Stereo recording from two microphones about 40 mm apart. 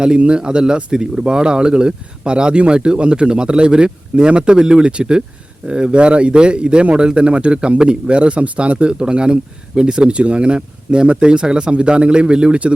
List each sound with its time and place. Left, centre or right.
0.0 s a man's voice: right